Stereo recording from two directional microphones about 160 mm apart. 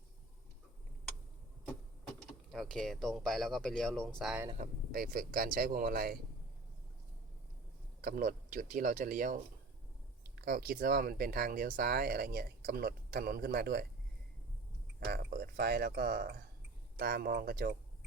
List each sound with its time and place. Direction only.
2.5 s speech: 5° left (ahead or behind)
4.5 s speech: 60° right (ahead or behind)
8.0 s speech: 60° right (ahead or behind)
10.2 s speech: 70° right (ahead or behind)
15.1 s speech: 70° right (ahead or behind)